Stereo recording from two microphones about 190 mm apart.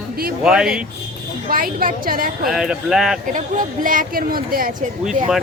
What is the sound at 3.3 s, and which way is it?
Speech, 40° right (ahead or behind).